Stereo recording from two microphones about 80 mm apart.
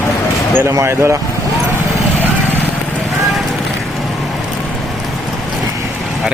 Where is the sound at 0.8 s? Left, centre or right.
Right.